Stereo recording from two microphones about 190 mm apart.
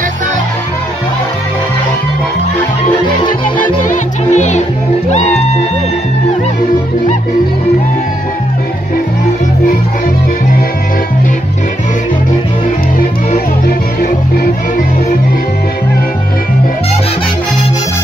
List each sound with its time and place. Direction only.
3.5 s music: 40° left (ahead or behind)